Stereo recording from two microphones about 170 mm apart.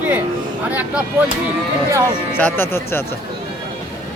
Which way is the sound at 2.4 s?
10° left (ahead or behind).